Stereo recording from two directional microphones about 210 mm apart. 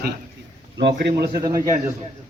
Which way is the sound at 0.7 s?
55° right (ahead or behind).